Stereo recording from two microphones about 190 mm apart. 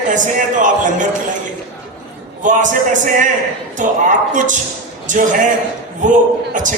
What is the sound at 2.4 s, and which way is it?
Speech, 40° right (ahead or behind).